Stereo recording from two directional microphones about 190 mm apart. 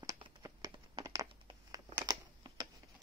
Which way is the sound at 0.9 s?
20° right (ahead or behind).